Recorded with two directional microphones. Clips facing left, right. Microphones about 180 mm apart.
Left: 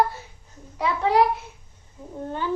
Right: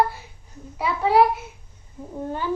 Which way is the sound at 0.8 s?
5° right (ahead or behind).